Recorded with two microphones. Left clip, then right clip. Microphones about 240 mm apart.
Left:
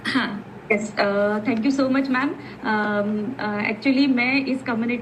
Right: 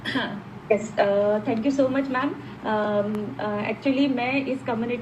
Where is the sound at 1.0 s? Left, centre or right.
Left.